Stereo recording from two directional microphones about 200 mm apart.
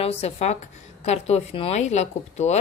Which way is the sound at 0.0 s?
30° left (ahead or behind).